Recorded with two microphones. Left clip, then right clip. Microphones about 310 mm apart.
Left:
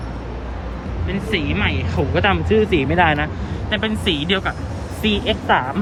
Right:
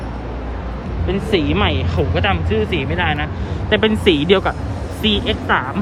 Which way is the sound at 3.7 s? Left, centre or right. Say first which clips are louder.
Right 6 dB; right.